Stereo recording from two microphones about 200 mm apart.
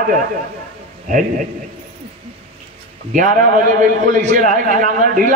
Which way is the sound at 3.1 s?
40° right (ahead or behind).